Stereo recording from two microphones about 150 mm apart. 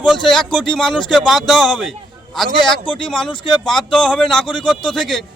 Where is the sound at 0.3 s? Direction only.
5° left (ahead or behind).